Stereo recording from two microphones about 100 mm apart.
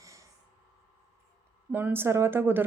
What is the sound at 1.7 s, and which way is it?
Speech, 20° right (ahead or behind).